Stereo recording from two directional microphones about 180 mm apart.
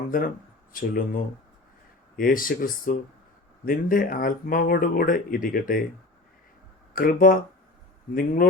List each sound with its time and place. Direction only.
0.1 s speech: 50° left (ahead or behind)
2.1 s speech: 50° left (ahead or behind)
6.9 s speech: 50° left (ahead or behind)